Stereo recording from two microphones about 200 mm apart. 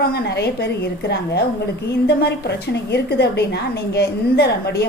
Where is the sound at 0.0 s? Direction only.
50° left (ahead or behind).